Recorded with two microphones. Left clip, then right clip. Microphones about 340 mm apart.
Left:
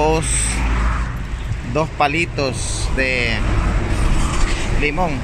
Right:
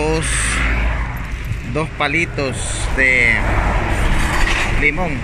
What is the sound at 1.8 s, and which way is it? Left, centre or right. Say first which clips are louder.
Speech: left 1 dB; centre.